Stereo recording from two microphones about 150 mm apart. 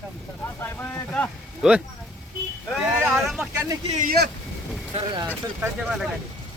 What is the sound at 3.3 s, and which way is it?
Speech, centre (ahead or behind).